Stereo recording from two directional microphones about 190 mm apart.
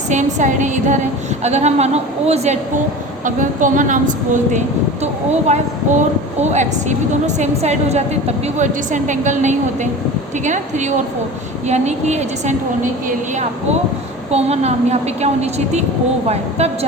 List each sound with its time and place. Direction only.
0.1 s a woman's voice: 40° right (ahead or behind)
5.3 s a woman's voice: 35° right (ahead or behind)
14.3 s a woman's voice: 35° right (ahead or behind)